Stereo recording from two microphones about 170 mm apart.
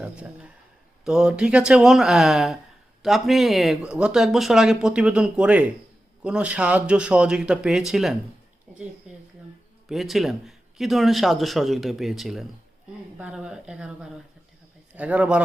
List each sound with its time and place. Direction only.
0.0 s speech: 5° right (ahead or behind)
9.1 s a sound: 5° right (ahead or behind)
9.9 s speech: centre (ahead or behind)